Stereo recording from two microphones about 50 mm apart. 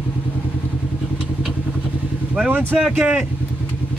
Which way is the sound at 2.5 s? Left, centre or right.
Right.